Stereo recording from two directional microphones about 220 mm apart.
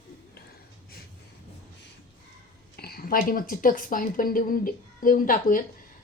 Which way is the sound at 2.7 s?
45° left (ahead or behind).